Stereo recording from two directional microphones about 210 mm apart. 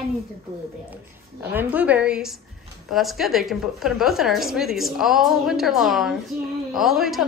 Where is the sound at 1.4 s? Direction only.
10° right (ahead or behind).